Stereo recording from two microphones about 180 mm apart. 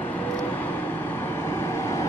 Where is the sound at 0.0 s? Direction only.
10° left (ahead or behind).